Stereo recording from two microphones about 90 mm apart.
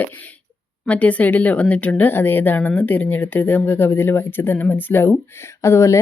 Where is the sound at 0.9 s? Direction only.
15° left (ahead or behind).